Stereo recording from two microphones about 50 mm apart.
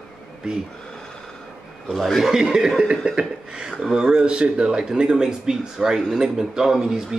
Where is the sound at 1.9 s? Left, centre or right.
Centre.